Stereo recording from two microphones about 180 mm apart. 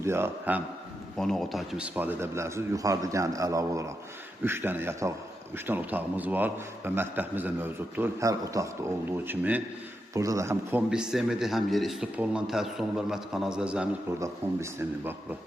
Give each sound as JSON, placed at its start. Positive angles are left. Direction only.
{"t": 0.0, "sound": "a man's voice", "side_deg": -15}
{"t": 1.2, "sound": "a man's voice", "side_deg": 0}
{"t": 14.2, "sound": "a man's voice", "side_deg": -15}